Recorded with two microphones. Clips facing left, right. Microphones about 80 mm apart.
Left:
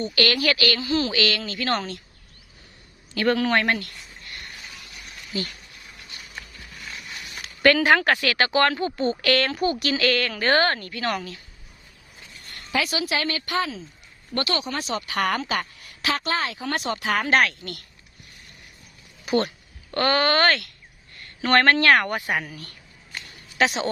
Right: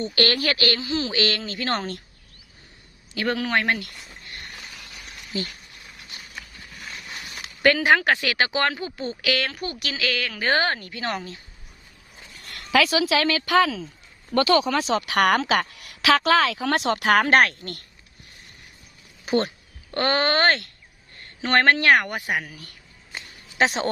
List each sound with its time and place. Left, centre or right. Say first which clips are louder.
0.0 s speech: even; right
0.8 s speech: left 2 dB; centre
1.2 s speech: even; right
3.2 s speech: left 3 dB; centre
7.6 s a woman's voice: left 1 dB; centre
10.5 s speech: left 2 dB; centre
12.4 s speech: right 6 dB; right
14.9 s speech: right 4 dB; right
19.2 s speech: even; right
21.4 s speech: left 1 dB; centre
23.1 s a sound: even; right